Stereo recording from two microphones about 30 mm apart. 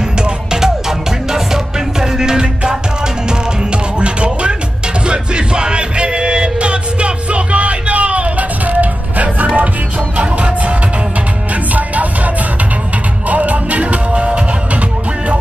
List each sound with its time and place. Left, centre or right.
0.2 s music: right
3.3 s music: right
11.7 s music: right
13.3 s music: right